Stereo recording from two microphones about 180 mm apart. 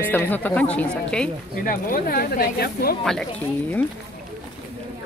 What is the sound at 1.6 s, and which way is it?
Speech, 50° left (ahead or behind).